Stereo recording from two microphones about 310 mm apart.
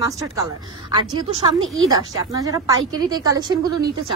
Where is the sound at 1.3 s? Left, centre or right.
Right.